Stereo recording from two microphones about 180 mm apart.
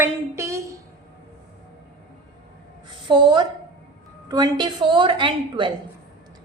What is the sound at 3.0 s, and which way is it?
A woman's voice, 25° right (ahead or behind).